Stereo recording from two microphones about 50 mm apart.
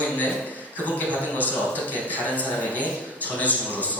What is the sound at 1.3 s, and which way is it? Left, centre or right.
A man's voice, left.